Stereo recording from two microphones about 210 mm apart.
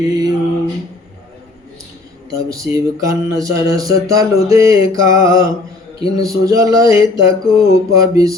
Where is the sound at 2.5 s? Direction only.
15° right (ahead or behind).